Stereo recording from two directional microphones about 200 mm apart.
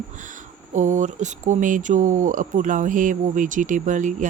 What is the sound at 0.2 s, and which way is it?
Speech, 40° right (ahead or behind).